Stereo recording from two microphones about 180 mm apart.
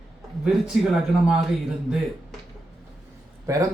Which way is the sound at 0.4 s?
5° right (ahead or behind).